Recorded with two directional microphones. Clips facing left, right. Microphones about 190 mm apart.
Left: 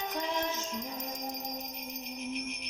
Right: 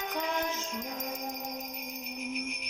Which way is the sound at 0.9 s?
70° right (ahead or behind).